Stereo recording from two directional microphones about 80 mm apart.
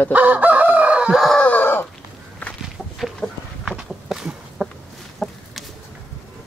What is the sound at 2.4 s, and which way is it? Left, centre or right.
Walk, left.